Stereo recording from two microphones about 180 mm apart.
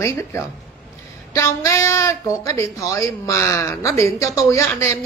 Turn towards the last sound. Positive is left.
turn(degrees=15)  # may be behind; listen again after turning